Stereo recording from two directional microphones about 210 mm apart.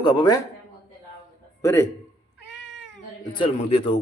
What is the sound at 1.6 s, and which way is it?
Speech, 15° left (ahead or behind).